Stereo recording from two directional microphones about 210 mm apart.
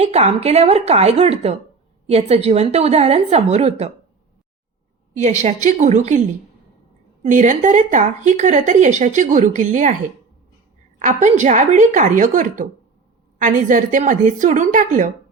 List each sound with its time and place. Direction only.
0.0 s a woman's voice: 30° right (ahead or behind)
5.1 s speech: 35° right (ahead or behind)
11.0 s speech: 35° right (ahead or behind)